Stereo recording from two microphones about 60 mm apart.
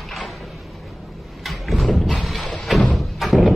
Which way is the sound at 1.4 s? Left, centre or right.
Centre.